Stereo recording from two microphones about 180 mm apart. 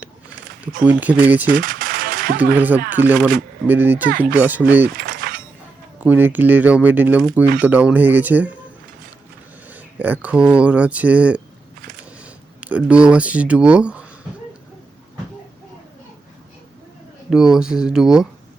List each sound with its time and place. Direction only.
0.9 s speech: 10° right (ahead or behind)
1.5 s music: 50° right (ahead or behind)
2.6 s speech: 10° right (ahead or behind)
4.9 s a sound: 50° right (ahead or behind)
6.0 s speech: 10° right (ahead or behind)
9.6 s speech: 10° right (ahead or behind)
17.2 s speech: 5° right (ahead or behind)